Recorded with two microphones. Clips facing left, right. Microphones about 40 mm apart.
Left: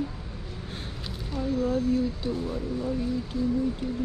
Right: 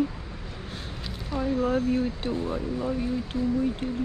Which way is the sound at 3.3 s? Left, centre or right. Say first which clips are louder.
Even; right.